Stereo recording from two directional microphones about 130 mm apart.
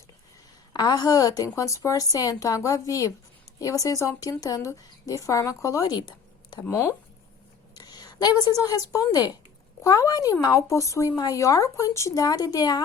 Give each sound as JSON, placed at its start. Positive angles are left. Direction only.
{"t": 0.7, "sound": "a woman's voice", "side_deg": 30}
{"t": 6.6, "sound": "a woman's voice", "side_deg": 20}